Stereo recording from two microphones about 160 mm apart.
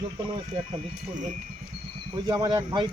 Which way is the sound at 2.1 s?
25° right (ahead or behind).